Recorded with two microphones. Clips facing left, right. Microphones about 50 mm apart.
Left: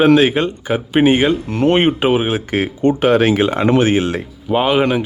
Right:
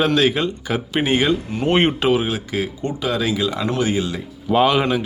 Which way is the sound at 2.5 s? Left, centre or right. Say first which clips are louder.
Left 8 dB; left.